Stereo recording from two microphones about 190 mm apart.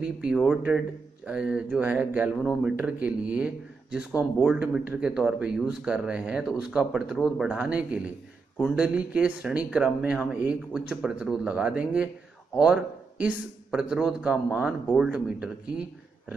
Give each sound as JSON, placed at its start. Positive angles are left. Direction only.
{"t": 0.0, "sound": "speech", "side_deg": -5}